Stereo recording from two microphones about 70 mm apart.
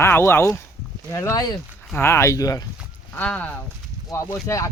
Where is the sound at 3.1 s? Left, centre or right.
Left.